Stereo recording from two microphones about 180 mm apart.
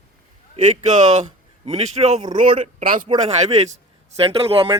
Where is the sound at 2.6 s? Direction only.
45° right (ahead or behind).